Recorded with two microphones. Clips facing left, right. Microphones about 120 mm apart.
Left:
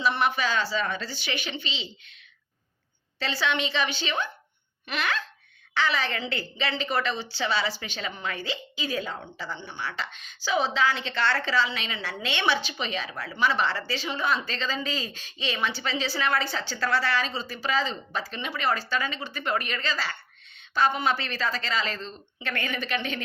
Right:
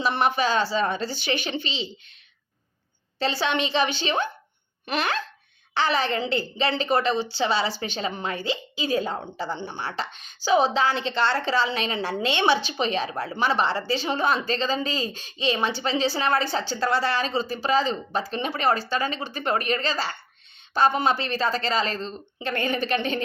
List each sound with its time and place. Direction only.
0.0 s speech: 40° right (ahead or behind)
3.2 s speech: 30° right (ahead or behind)
7.2 s a woman's voice: 20° right (ahead or behind)
11.5 s a woman's voice: 35° right (ahead or behind)